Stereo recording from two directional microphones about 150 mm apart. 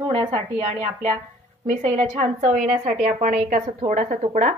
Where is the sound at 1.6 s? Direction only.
45° right (ahead or behind).